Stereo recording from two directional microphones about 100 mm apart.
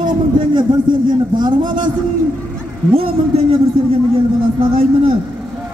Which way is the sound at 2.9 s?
75° right (ahead or behind).